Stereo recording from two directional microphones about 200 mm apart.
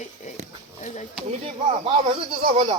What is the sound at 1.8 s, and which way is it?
Speech, 25° right (ahead or behind).